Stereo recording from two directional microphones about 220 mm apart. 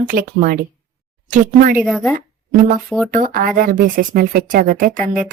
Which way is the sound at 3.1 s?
40° right (ahead or behind).